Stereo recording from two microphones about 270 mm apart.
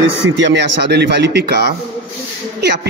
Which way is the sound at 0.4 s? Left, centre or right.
Right.